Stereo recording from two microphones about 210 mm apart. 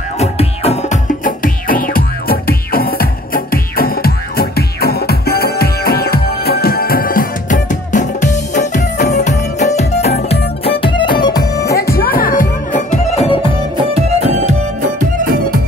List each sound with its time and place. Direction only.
0.2 s music: 30° left (ahead or behind)
11.9 s music: 45° left (ahead or behind); by 13.5 s 25° left (ahead or behind)
13.9 s music: 30° right (ahead or behind)